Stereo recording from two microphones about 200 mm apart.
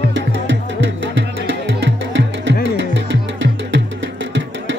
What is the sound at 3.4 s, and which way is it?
Music, 65° right (ahead or behind).